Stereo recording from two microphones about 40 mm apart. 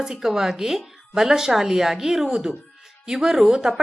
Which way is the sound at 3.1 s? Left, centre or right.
Centre.